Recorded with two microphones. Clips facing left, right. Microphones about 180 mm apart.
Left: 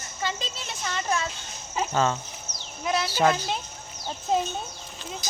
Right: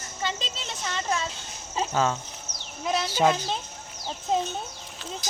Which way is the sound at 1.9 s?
5° right (ahead or behind).